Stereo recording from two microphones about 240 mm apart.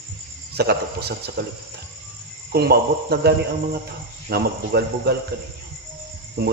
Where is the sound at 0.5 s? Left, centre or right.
Right.